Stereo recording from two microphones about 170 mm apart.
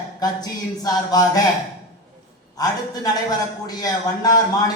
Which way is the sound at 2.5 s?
20° left (ahead or behind).